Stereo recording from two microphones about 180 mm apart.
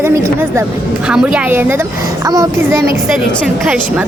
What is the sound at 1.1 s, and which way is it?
A child's voice, 5° right (ahead or behind).